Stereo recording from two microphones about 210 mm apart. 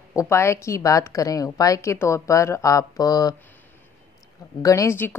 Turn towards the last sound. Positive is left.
turn(degrees=10)  # may be behind; listen again after turning